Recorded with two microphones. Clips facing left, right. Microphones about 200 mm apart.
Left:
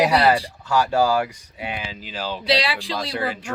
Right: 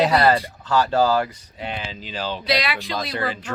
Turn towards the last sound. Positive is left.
turn(degrees=10)  # may be behind; listen again after turning